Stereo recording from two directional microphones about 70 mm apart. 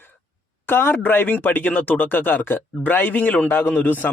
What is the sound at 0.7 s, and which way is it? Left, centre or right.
Speech, left.